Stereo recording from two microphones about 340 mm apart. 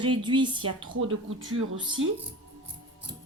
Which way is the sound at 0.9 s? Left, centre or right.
Right.